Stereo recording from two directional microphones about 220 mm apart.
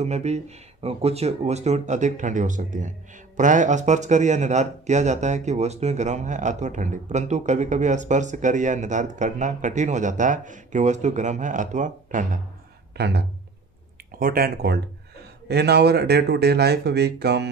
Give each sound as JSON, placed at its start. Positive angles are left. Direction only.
{"t": 0.0, "sound": "speech", "side_deg": -30}
{"t": 12.9, "sound": "speech", "side_deg": -45}